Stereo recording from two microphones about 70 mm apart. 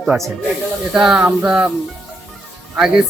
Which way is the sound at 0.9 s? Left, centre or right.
Centre.